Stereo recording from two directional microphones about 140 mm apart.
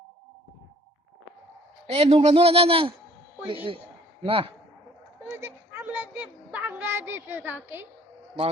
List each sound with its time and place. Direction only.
1.9 s speech: 45° right (ahead or behind)
4.2 s speech: 40° right (ahead or behind)
5.3 s child singing: 15° right (ahead or behind)